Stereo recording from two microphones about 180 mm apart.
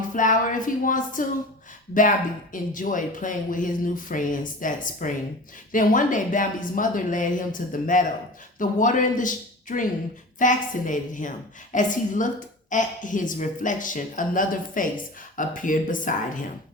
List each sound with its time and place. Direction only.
0.1 s speech: 45° left (ahead or behind)